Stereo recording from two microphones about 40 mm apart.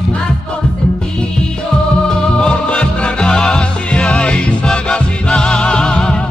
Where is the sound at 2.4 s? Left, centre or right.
Left.